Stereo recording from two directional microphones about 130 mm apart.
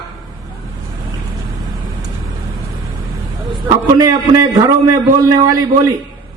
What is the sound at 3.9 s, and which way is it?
A man's voice, 25° right (ahead or behind).